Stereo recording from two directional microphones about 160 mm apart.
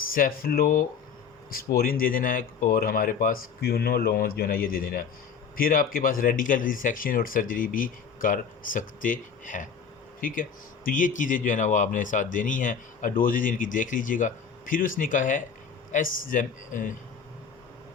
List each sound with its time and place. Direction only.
0.0 s speech: 65° left (ahead or behind)